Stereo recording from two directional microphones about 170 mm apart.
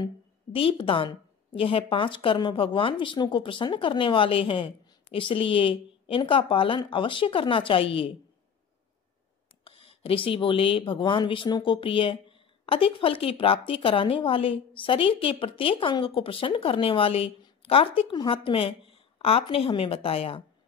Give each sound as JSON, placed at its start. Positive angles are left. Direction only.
{"t": 0.0, "sound": "speech", "side_deg": 30}
{"t": 9.7, "sound": "speech", "side_deg": 35}